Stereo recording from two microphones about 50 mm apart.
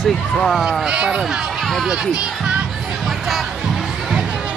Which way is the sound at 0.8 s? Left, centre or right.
Centre.